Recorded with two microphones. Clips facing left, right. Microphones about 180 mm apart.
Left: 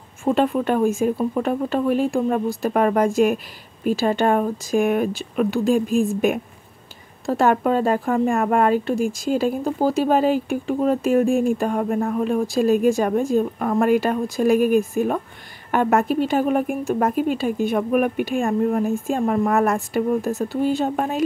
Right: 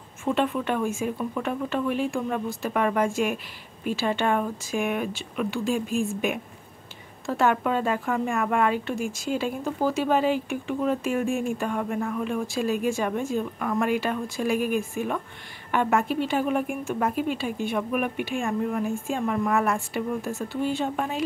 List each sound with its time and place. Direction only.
0.2 s speech: 40° left (ahead or behind)
7.2 s speech: 40° left (ahead or behind)